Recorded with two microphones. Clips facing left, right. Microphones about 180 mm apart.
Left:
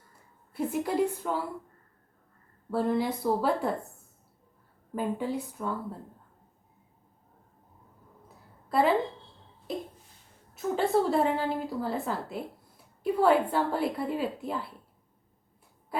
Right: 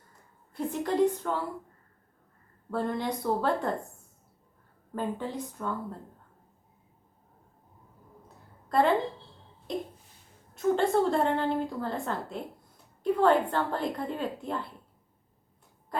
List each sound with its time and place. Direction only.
0.5 s a woman's voice: 5° left (ahead or behind)
2.6 s a woman's voice: 5° left (ahead or behind)
4.9 s a woman's voice: 10° left (ahead or behind)
8.7 s a woman's voice: 5° left (ahead or behind)
15.9 s a sound: 5° left (ahead or behind)